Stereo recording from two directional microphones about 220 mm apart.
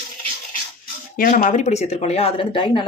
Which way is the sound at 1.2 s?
40° left (ahead or behind).